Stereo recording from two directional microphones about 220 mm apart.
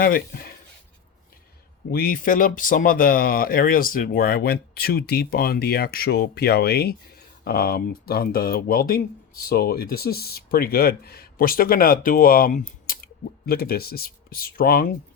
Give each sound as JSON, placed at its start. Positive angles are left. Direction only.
{"t": 0.0, "sound": "speech", "side_deg": 40}
{"t": 1.9, "sound": "speech", "side_deg": 40}